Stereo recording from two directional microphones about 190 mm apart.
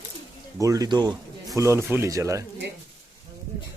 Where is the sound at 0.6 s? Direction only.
20° right (ahead or behind).